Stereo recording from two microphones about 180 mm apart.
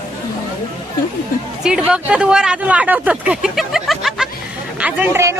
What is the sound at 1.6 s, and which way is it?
Speech, 5° right (ahead or behind).